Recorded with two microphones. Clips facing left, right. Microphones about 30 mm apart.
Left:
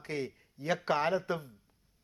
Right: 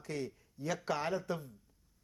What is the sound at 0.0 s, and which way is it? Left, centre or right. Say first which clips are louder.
A man's voice: left 3 dB; left.